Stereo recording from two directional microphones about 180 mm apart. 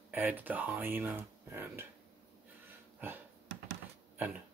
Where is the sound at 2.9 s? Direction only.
10° right (ahead or behind).